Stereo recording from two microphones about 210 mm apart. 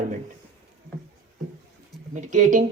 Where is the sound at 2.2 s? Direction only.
35° right (ahead or behind).